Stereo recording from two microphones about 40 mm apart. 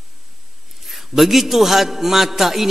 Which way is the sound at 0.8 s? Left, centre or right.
Centre.